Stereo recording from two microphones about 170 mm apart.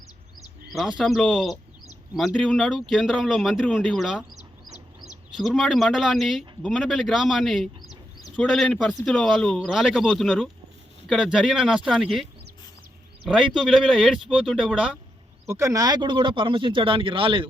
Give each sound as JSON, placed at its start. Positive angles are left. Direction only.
{"t": 0.7, "sound": "speech", "side_deg": 0}
{"t": 5.4, "sound": "a man's voice", "side_deg": 0}
{"t": 13.6, "sound": "speech", "side_deg": 0}
{"t": 15.4, "sound": "speech", "side_deg": -15}